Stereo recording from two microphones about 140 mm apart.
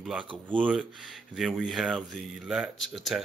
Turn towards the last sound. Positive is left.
turn(degrees=0)  # may be behind; listen again after turning